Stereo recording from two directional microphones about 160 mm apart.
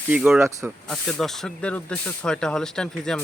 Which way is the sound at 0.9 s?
Centre (ahead or behind).